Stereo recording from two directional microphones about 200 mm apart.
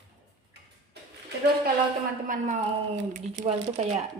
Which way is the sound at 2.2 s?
40° right (ahead or behind).